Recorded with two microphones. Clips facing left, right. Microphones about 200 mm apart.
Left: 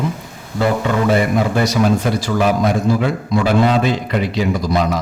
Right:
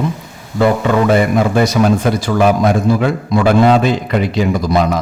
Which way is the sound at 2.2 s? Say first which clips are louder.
Right 3 dB; 55° right (ahead or behind).